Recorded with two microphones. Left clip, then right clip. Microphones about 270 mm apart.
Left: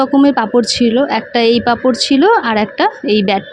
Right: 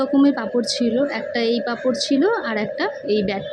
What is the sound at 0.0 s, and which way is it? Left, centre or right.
A woman's voice, left.